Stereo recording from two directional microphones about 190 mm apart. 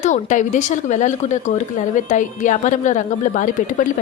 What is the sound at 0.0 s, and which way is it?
A woman's voice, 40° left (ahead or behind).